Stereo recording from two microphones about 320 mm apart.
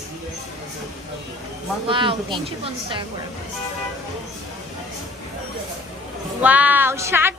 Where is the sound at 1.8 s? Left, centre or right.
Centre.